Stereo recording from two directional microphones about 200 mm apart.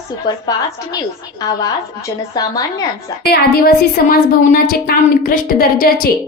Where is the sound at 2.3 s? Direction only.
20° left (ahead or behind).